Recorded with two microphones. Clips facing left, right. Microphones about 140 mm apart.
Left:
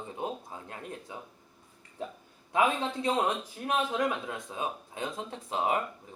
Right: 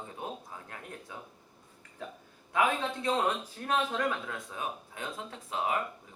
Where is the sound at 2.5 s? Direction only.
20° left (ahead or behind).